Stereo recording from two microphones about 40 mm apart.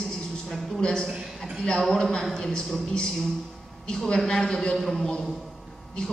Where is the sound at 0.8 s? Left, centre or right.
Centre.